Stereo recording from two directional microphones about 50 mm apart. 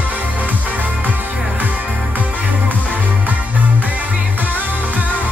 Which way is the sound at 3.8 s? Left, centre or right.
Right.